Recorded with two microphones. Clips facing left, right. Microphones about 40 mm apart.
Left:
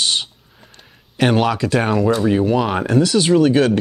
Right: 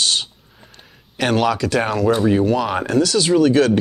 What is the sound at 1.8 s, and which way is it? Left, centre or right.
Speech, centre.